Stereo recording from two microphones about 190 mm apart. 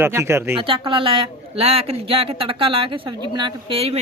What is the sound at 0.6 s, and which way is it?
Speech, 25° right (ahead or behind).